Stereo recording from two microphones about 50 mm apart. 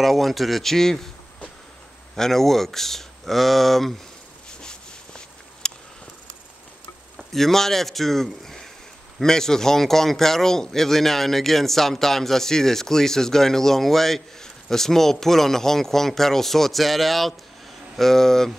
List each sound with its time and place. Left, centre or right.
0.0 s speech: centre
2.1 s speech: centre
4.5 s a sound: centre
7.2 s a man's voice: centre